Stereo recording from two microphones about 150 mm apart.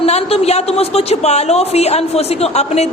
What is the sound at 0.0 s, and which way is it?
Speech, 45° left (ahead or behind).